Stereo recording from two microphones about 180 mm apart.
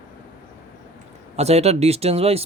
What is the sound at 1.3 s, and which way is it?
Speech, 35° right (ahead or behind).